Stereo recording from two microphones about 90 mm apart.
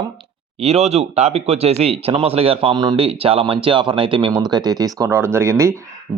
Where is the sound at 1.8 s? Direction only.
90° right.